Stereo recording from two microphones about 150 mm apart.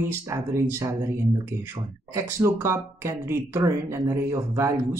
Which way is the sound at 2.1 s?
20° right (ahead or behind).